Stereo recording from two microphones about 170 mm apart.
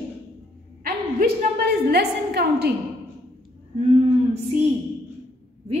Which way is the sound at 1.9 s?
75° right (ahead or behind).